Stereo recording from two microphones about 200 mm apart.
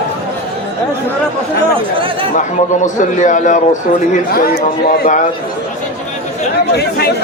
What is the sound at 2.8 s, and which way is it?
Speech, 40° left (ahead or behind).